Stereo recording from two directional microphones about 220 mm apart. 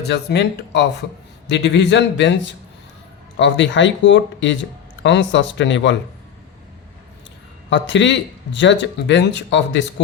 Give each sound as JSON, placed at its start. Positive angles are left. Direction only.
{"t": 0.0, "sound": "a man's voice", "side_deg": 50}
{"t": 7.7, "sound": "speech", "side_deg": 55}